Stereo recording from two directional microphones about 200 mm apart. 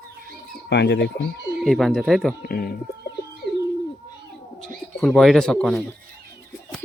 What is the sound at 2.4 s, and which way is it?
Speech, 50° left (ahead or behind).